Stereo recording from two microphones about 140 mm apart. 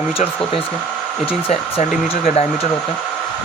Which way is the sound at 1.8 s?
60° left (ahead or behind).